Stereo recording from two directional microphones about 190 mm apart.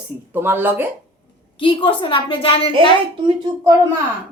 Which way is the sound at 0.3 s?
10° right (ahead or behind).